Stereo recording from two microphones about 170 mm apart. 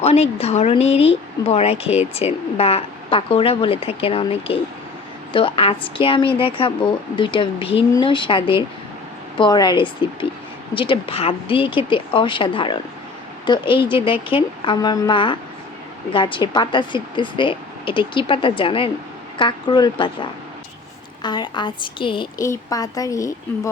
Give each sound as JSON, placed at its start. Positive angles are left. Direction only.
{"t": 0.0, "sound": "a woman's voice", "side_deg": 40}
{"t": 22.4, "sound": "a woman's voice", "side_deg": 20}